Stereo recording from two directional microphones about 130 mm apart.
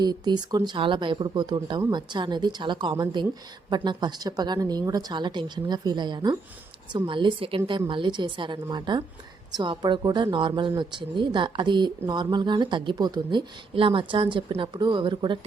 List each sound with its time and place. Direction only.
0.0 s speech: 30° right (ahead or behind)